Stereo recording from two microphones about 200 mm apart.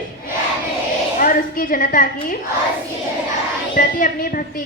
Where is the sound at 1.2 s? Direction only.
45° left (ahead or behind).